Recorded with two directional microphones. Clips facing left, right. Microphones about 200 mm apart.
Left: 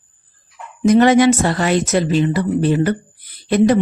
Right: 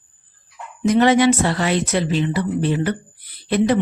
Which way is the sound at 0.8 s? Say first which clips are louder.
Left 3 dB; 45° left (ahead or behind).